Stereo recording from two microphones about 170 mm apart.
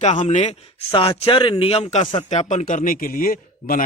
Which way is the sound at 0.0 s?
45° left (ahead or behind).